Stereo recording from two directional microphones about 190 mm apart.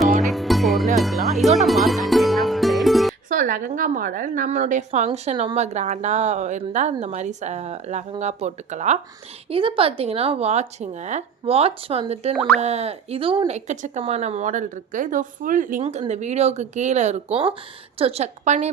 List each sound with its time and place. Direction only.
0.3 s music: centre (ahead or behind)
3.2 s speech: 45° right (ahead or behind); by 13.6 s 25° right (ahead or behind)
13.7 s speech: 40° right (ahead or behind)